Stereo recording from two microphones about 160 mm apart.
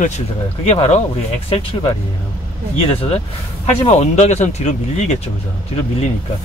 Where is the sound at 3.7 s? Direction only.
40° left (ahead or behind).